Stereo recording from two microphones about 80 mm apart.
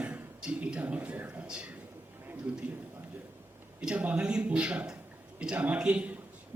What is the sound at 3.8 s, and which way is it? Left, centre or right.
A man's voice, centre.